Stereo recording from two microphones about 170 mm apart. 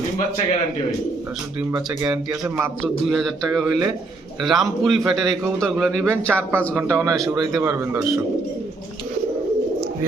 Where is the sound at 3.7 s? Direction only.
20° right (ahead or behind).